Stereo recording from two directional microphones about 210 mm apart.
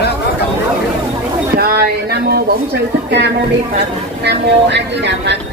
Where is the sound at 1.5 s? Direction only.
50° right (ahead or behind).